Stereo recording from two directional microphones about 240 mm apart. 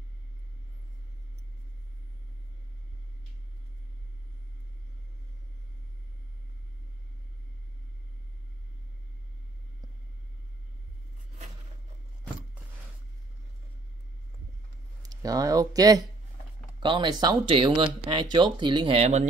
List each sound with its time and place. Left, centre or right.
15.0 s speech: centre